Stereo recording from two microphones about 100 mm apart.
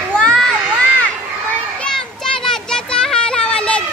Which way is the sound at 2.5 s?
5° left (ahead or behind).